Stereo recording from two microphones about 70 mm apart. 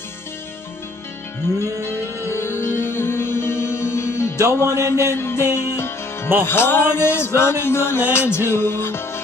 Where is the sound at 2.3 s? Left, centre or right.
Left.